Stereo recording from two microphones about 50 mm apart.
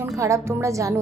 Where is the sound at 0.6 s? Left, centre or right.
Right.